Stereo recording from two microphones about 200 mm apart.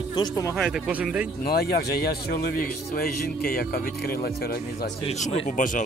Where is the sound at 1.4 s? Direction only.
50° left (ahead or behind).